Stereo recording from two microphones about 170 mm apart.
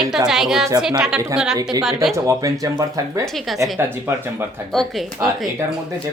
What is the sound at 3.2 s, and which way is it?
Speech, centre (ahead or behind).